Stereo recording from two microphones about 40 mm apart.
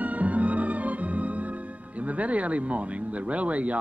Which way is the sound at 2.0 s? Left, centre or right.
Right.